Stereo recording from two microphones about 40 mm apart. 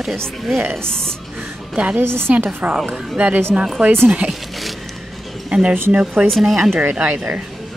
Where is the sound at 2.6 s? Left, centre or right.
Right.